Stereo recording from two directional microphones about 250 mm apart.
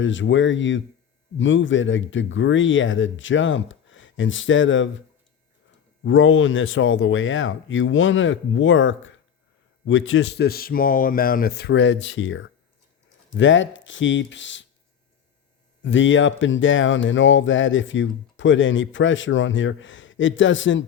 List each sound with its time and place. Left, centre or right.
0.0 s speech: left
15.8 s speech: left